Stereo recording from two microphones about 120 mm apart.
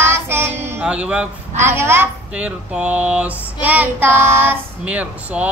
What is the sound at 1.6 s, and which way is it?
Speech, 20° right (ahead or behind).